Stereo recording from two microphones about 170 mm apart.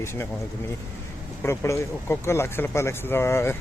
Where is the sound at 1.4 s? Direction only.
15° left (ahead or behind).